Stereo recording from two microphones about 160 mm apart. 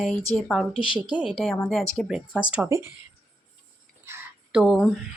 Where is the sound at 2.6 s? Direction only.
20° right (ahead or behind).